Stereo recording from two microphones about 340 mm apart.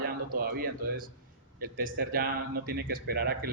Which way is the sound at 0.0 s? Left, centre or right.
Right.